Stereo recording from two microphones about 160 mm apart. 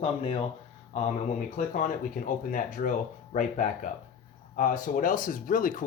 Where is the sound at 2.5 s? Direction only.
55° left (ahead or behind).